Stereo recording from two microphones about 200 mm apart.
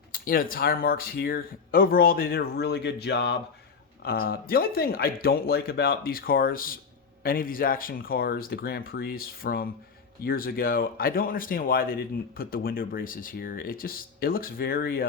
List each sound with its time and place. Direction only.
0.1 s speech: 45° left (ahead or behind)